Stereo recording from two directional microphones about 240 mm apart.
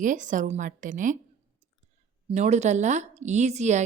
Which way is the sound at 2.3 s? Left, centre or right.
Right.